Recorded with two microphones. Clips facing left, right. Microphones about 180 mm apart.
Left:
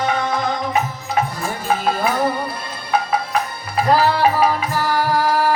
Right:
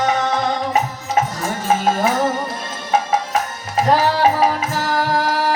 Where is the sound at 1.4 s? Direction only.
40° right (ahead or behind).